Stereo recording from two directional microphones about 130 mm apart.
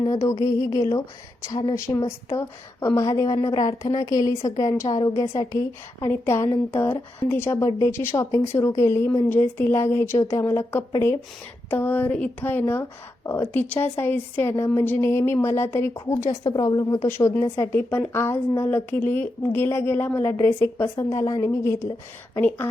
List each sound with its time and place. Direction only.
0.0 s a woman's voice: 30° left (ahead or behind)
1.7 s a woman's voice: 25° left (ahead or behind)
17.1 s a woman's voice: 20° left (ahead or behind)